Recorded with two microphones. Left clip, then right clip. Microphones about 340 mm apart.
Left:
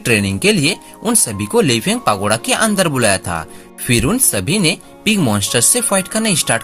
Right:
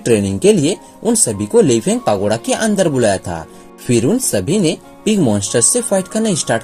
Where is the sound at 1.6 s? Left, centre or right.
Left.